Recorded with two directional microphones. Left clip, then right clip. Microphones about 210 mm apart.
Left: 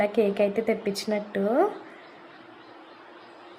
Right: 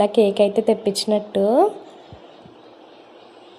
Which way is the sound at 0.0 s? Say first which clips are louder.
Right 7 dB; 15° right (ahead or behind).